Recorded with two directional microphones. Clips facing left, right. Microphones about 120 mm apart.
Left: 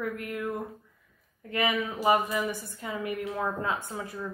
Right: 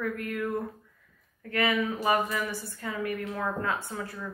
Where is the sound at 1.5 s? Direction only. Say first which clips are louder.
Right 1 dB; 20° left (ahead or behind).